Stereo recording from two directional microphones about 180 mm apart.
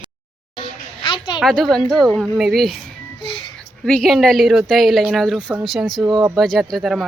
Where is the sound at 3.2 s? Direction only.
30° left (ahead or behind).